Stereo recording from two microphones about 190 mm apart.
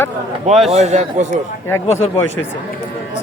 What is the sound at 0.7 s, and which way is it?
Speech, 35° right (ahead or behind).